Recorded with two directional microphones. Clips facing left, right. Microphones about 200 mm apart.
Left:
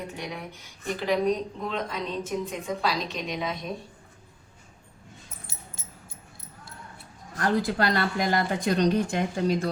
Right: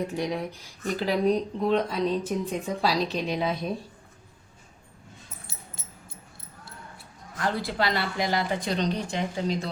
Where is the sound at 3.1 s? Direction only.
35° right (ahead or behind).